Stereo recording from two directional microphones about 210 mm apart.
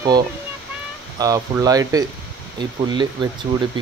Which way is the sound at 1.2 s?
15° right (ahead or behind).